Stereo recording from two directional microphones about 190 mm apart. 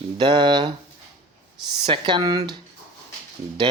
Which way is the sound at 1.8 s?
25° right (ahead or behind).